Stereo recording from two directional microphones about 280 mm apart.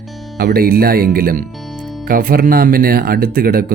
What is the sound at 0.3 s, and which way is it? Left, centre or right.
Speech, right.